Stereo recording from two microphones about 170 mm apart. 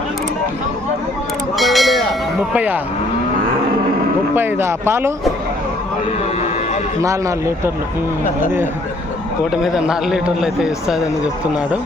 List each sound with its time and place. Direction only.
1.5 s a sound: centre (ahead or behind)
2.5 s speech: 10° right (ahead or behind)
4.4 s speech: 10° right (ahead or behind)
7.0 s speech: 20° right (ahead or behind)
9.5 s a man's voice: 5° right (ahead or behind)